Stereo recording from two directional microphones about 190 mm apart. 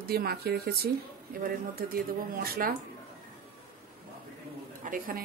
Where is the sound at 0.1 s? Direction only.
55° right (ahead or behind).